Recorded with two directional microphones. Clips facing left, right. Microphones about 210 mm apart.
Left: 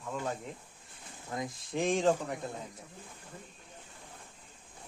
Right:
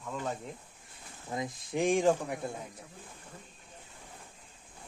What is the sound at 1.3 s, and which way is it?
Speech, 20° right (ahead or behind).